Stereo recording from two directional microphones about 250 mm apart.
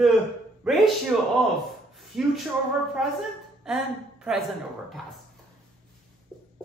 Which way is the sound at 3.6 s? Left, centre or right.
Centre.